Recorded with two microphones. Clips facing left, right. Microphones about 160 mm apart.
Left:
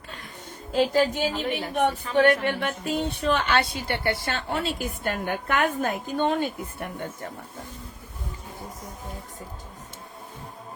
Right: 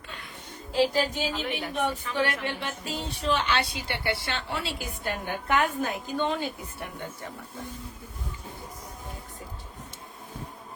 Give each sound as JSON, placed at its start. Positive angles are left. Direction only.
{"t": 0.7, "sound": "a woman's voice", "side_deg": 50}
{"t": 2.1, "sound": "a woman's voice", "side_deg": 55}